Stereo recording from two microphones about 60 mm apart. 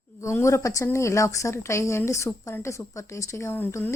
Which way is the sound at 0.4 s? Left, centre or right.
Left.